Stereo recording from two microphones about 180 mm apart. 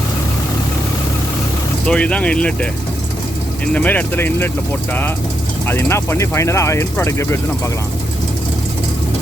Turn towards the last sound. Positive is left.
turn(degrees=15)  # may be behind; listen again after turning